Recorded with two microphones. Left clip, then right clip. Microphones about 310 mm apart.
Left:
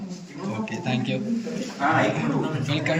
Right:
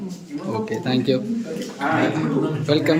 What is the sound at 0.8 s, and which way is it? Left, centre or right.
Speech, centre.